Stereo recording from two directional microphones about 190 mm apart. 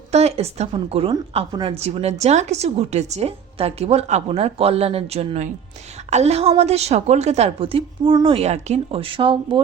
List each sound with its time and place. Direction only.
0.1 s a woman's voice: 35° right (ahead or behind)